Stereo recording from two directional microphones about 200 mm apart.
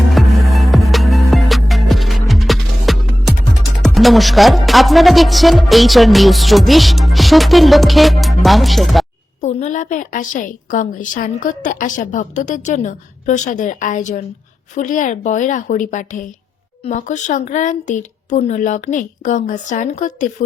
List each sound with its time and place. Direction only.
0.1 s music: centre (ahead or behind)
3.8 s speech: centre (ahead or behind)
9.4 s a woman's voice: 35° left (ahead or behind)